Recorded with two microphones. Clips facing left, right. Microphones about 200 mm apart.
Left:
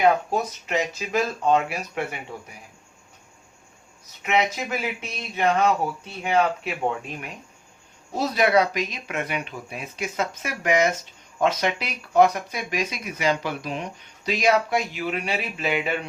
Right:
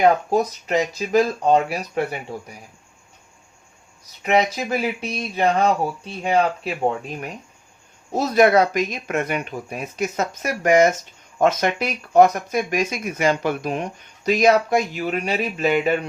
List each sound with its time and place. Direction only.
0.0 s speech: 40° right (ahead or behind)
4.2 s speech: 35° right (ahead or behind)
8.1 s speech: 50° right (ahead or behind)